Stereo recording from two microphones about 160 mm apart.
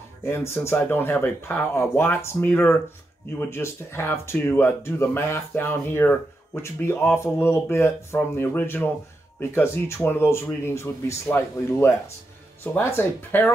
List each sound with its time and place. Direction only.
0.2 s speech: 15° left (ahead or behind)